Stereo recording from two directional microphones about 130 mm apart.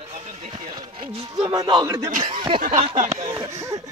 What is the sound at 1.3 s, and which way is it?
Speech, 30° right (ahead or behind).